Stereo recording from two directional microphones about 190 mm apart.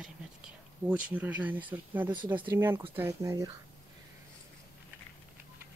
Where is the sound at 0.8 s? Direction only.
10° right (ahead or behind).